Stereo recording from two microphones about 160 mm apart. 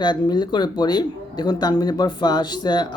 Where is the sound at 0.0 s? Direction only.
25° left (ahead or behind).